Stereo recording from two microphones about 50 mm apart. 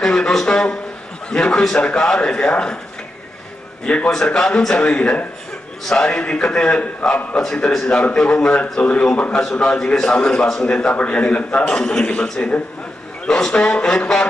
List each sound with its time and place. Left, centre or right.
0.0 s a man's voice: centre
3.8 s a man's voice: left
4.1 s a man's voice: centre
7.7 s speech: centre
8.0 s a man's voice: centre
12.1 s a man's voice: left